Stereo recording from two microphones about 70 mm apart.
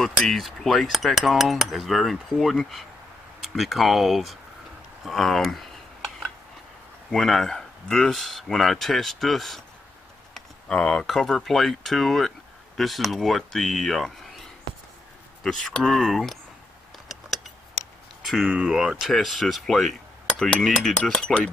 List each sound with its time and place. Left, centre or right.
0.0 s speech: centre
7.1 s speech: centre
10.7 s speech: centre
18.2 s a sound: centre
18.5 s speech: centre
20.9 s speech: centre